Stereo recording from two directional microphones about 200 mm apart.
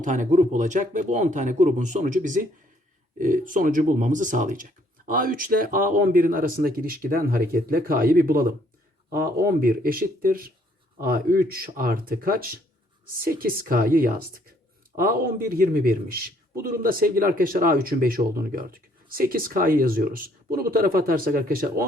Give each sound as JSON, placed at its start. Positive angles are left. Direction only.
{"t": 0.0, "sound": "a man's voice", "side_deg": -40}